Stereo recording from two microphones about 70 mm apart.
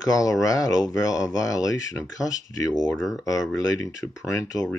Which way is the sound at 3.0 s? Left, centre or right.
Centre.